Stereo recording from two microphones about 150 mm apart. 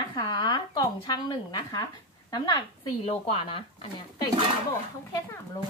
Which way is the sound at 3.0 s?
45° left (ahead or behind).